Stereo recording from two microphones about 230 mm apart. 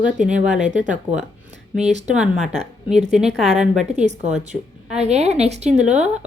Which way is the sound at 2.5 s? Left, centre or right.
Right.